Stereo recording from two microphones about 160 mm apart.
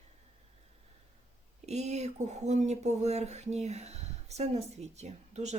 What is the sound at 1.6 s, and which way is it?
Speech, 45° right (ahead or behind).